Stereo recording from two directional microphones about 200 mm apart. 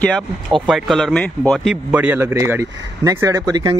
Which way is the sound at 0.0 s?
5° left (ahead or behind).